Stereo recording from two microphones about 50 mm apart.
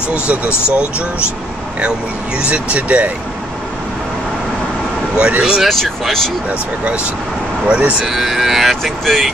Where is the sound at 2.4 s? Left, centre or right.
Right.